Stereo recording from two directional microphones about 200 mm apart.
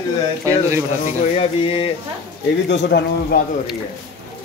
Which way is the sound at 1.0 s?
30° left (ahead or behind).